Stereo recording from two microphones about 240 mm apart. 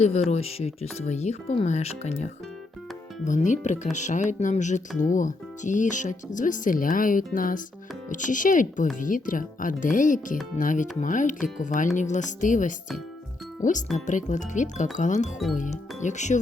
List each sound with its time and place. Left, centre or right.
0.0 s speech: left
3.2 s speech: left
13.9 s speech: left